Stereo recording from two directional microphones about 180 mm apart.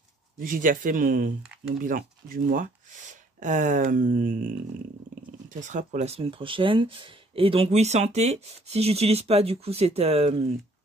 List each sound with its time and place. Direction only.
0.4 s speech: 50° right (ahead or behind)
1.4 s a sound: 5° right (ahead or behind)
1.8 s speech: 50° right (ahead or behind)
5.6 s speech: 45° right (ahead or behind)